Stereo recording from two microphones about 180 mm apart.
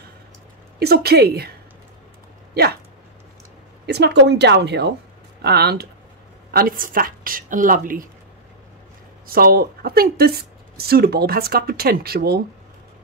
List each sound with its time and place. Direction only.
0.7 s speech: 60° right (ahead or behind)
2.5 s speech: 60° right (ahead or behind)
3.8 s a woman's voice: 70° right (ahead or behind); by 8.1 s 50° right (ahead or behind)
9.3 s speech: 55° right (ahead or behind)